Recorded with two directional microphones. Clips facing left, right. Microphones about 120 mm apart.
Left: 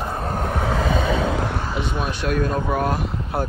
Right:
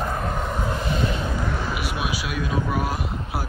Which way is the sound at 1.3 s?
55° left (ahead or behind).